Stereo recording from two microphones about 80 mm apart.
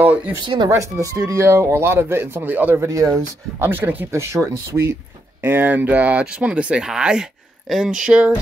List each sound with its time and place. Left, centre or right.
0.7 s speech: right
3.6 s speech: right
5.4 s speech: right; by 8.3 s centre